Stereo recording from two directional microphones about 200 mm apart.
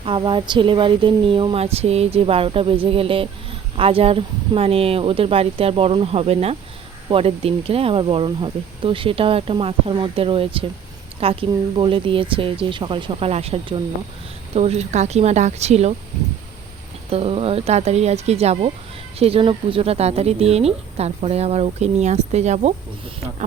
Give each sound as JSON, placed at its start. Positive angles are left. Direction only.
{"t": 0.0, "sound": "speech", "side_deg": -25}
{"t": 17.1, "sound": "speech", "side_deg": -30}